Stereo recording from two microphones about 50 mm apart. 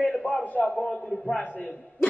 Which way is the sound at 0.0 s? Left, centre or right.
Left.